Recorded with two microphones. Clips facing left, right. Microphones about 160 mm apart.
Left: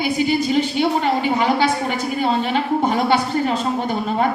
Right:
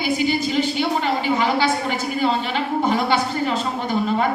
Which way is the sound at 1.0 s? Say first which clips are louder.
Left 2 dB; 45° left (ahead or behind).